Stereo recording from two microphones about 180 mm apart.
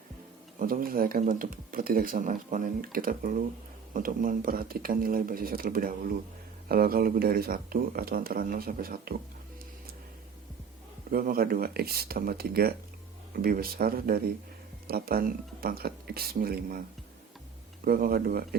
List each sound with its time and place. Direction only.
0.6 s speech: 50° right (ahead or behind)
11.1 s speech: 55° right (ahead or behind)
17.8 s speech: 55° right (ahead or behind)